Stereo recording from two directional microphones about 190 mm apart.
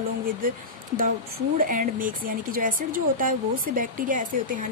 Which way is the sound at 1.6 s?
45° right (ahead or behind).